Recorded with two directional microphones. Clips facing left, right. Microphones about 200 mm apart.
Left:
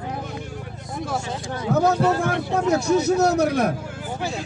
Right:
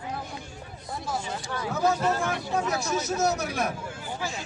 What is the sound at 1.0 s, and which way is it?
Speech, 75° left (ahead or behind).